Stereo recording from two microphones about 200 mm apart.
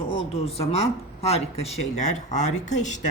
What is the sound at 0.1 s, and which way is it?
Speech, 30° left (ahead or behind).